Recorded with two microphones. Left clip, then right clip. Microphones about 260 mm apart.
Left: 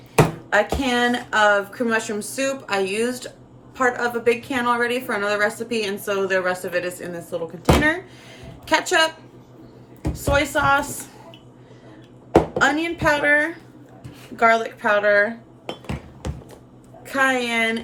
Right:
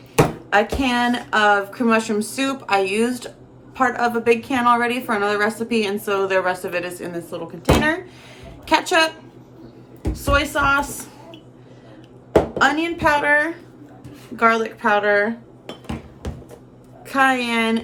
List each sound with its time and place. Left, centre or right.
0.5 s a woman's voice: centre
8.4 s a sound: centre
10.2 s a woman's voice: centre
12.5 s a woman's voice: centre
15.6 s hammer: left
17.1 s a woman's voice: centre